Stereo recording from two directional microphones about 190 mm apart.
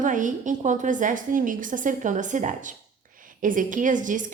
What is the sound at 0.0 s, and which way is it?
A woman's voice, 40° right (ahead or behind).